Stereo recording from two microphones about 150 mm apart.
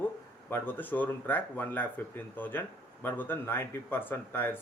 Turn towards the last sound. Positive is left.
turn(degrees=15)  # may be behind; listen again after turning